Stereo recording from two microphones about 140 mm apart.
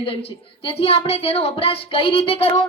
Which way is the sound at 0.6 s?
45° left (ahead or behind).